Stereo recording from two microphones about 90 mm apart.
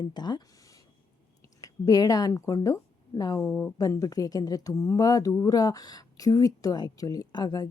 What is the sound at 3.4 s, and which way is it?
Speech, 20° left (ahead or behind).